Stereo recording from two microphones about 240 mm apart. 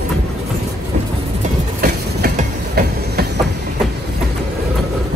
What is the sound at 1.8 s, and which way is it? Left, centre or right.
Train, right.